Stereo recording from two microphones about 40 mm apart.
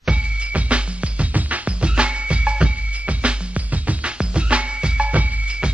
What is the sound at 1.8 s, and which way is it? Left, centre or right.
Music, right.